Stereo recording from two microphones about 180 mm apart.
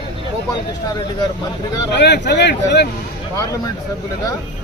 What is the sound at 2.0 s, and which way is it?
Speech, 70° left (ahead or behind).